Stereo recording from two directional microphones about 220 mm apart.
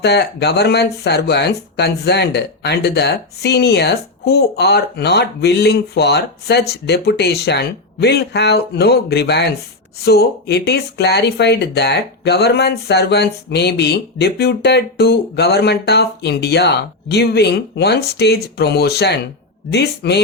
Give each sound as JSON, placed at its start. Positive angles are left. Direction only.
{"t": 0.0, "sound": "speech", "side_deg": 50}